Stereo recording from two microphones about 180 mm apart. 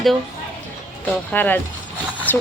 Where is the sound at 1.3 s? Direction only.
10° left (ahead or behind).